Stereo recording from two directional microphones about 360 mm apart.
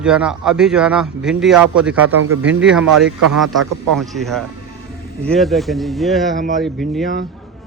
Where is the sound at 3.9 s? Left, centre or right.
Centre.